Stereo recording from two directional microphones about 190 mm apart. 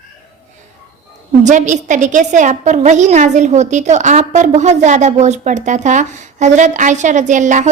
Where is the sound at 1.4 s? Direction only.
40° right (ahead or behind).